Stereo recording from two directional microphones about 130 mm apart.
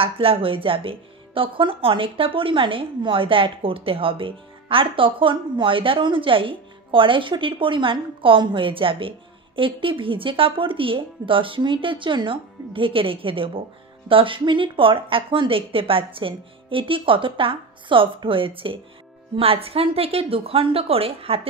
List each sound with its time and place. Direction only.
0.0 s a woman's voice: 45° right (ahead or behind)